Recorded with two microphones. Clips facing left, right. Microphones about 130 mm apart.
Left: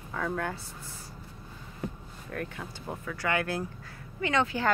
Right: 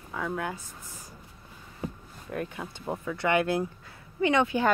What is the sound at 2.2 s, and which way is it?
A woman's voice, 20° right (ahead or behind).